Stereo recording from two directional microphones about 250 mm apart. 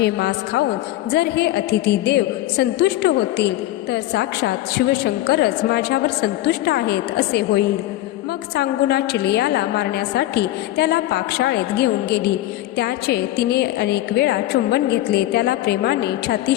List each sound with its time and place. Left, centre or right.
0.0 s a woman's voice: left